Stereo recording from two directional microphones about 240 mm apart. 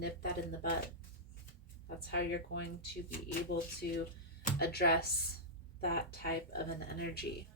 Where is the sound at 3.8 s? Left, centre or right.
Left.